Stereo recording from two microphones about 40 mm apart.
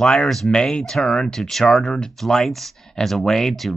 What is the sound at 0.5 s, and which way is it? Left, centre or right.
Speech, left.